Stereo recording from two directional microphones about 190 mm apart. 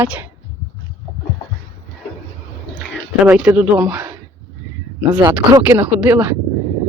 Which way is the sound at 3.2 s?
10° right (ahead or behind).